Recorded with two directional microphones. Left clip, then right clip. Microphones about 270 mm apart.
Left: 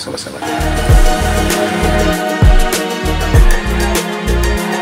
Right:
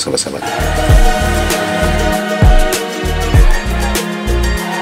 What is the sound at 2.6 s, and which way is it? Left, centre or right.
Music, centre.